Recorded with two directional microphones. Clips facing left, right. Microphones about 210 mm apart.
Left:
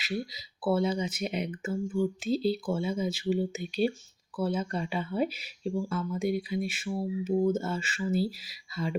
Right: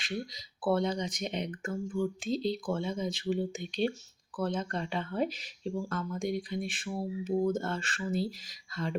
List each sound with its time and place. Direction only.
0.0 s speech: 5° left (ahead or behind)